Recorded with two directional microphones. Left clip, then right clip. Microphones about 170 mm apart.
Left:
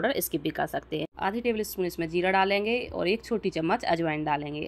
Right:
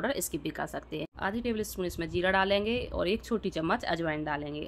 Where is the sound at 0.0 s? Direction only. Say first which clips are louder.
Left 5 dB; 10° left (ahead or behind).